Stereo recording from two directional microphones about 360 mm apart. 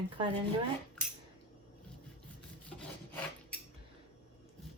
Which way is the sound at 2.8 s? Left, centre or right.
Centre.